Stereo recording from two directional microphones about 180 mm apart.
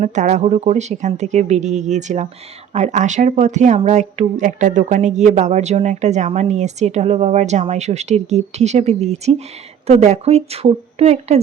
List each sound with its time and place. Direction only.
0.0 s speech: 40° right (ahead or behind)